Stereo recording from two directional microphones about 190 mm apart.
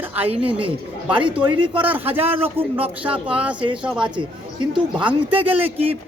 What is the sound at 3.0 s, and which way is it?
Speech, 5° right (ahead or behind).